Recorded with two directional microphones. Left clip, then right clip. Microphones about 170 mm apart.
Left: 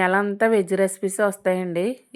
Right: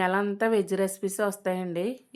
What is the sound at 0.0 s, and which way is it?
Speech, 25° left (ahead or behind).